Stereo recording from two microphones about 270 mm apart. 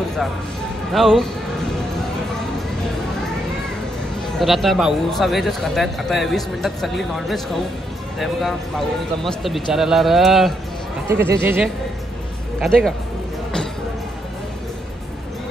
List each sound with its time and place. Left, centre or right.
0.9 s a man's voice: centre
4.4 s a man's voice: centre